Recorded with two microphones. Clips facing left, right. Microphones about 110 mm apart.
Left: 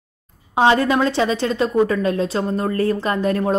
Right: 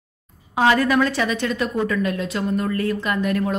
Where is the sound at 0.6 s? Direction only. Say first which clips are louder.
Left 2 dB; 25° left (ahead or behind).